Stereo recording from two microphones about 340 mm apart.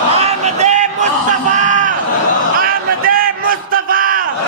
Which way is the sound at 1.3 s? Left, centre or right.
Right.